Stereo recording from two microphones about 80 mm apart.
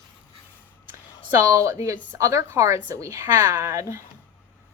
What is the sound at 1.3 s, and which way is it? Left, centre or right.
A woman's voice, right.